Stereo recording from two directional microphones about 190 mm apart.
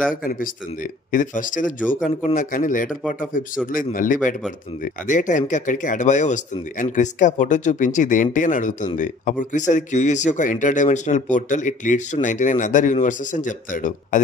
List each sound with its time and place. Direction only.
0.1 s a man's voice: 45° left (ahead or behind)